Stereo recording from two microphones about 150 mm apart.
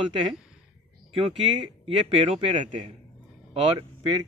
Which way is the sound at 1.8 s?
40° right (ahead or behind).